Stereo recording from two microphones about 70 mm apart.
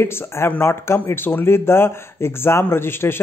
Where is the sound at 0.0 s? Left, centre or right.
Left.